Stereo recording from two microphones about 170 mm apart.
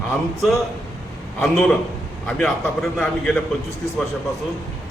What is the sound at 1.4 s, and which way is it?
A man's voice, centre (ahead or behind).